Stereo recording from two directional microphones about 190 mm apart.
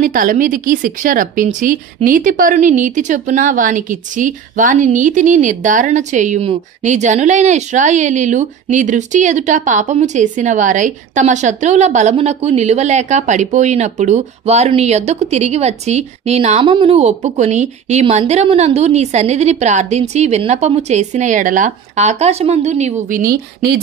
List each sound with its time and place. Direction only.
0.0 s a woman's voice: 45° right (ahead or behind)